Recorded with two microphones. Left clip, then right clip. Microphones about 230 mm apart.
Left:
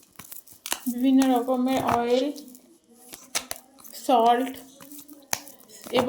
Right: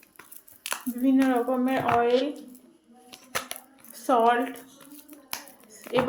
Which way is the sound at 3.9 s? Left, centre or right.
Left.